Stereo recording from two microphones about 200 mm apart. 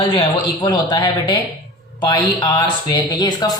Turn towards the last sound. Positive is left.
turn(degrees=20)  # may be behind; listen again after turning